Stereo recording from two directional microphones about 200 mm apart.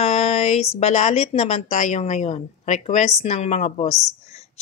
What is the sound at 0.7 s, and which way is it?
A woman's voice, 35° left (ahead or behind).